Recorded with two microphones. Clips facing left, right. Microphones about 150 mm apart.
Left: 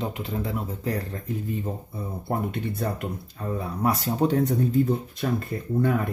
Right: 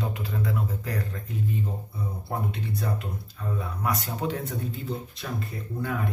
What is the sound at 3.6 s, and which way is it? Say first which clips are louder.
Speech: left 6 dB; 30° left (ahead or behind).